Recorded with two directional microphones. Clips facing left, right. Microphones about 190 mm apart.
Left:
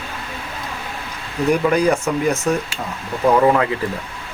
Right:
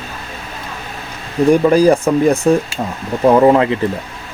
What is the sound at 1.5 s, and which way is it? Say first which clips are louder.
Speech: right 6 dB; 30° right (ahead or behind).